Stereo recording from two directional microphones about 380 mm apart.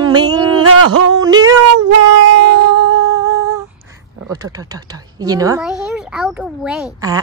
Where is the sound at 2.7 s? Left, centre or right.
Right.